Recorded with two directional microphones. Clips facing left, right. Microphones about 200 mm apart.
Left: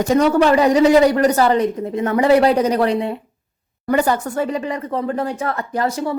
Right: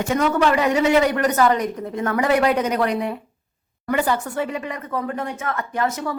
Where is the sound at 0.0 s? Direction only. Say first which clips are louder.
Left 5 dB; 35° left (ahead or behind).